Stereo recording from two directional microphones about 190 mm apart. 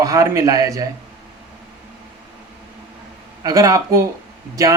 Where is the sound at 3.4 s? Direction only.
20° right (ahead or behind).